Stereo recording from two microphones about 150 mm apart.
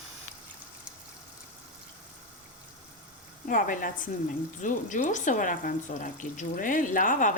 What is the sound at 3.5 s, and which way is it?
Speech, 65° left (ahead or behind).